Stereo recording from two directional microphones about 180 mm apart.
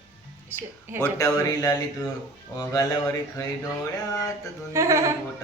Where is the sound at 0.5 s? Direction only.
10° right (ahead or behind).